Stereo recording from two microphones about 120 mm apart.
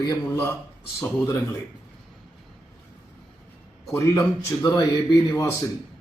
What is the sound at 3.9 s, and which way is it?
Speech, 20° left (ahead or behind).